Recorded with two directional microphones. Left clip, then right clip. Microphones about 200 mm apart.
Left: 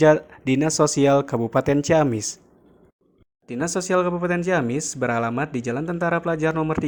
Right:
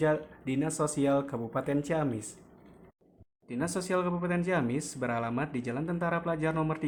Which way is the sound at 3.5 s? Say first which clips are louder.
Left 9 dB; 30° left (ahead or behind).